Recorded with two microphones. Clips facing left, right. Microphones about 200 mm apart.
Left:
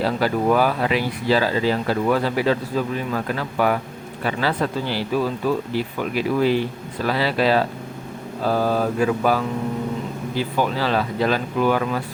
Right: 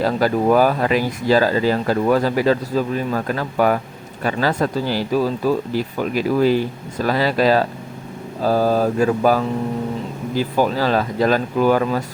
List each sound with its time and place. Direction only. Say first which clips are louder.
0.0 s speech: right 3 dB; 45° right (ahead or behind)